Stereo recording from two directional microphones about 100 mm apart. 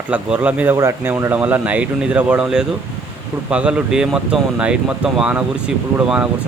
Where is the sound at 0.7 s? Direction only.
30° right (ahead or behind).